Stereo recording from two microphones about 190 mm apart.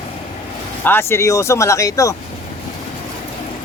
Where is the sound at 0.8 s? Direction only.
15° left (ahead or behind).